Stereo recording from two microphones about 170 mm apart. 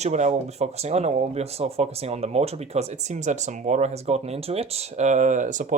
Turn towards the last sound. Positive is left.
turn(degrees=-45)  # may be behind; listen again after turning